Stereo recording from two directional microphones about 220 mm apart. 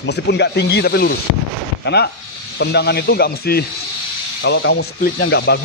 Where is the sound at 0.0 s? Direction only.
50° left (ahead or behind).